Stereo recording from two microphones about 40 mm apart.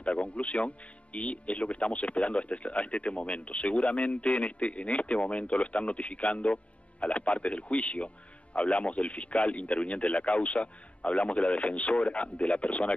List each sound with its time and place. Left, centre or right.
0.0 s speech: left